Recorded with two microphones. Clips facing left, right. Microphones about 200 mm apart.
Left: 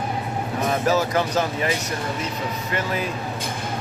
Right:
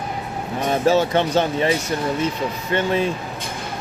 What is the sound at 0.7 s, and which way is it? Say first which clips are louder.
Speech: right 4 dB; 30° right (ahead or behind).